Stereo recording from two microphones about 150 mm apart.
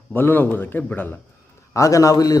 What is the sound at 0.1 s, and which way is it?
A man's voice, 15° left (ahead or behind).